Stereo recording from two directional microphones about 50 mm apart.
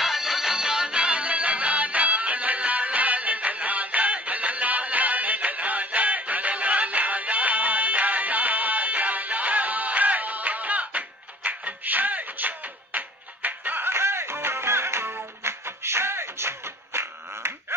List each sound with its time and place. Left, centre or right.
0.0 s music: centre; by 13.8 s right
13.8 s music: right